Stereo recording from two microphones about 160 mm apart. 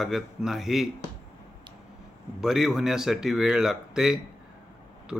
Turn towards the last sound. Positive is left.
turn(degrees=-5)  # may be behind; listen again after turning